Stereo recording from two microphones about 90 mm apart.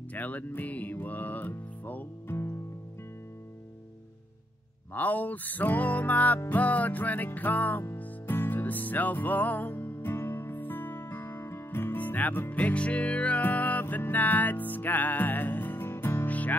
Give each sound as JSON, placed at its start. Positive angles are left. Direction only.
{"t": 0.1, "sound": "music", "side_deg": 20}
{"t": 4.9, "sound": "music", "side_deg": 20}